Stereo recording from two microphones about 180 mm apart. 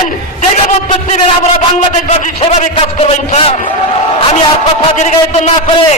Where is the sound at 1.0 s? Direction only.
40° left (ahead or behind).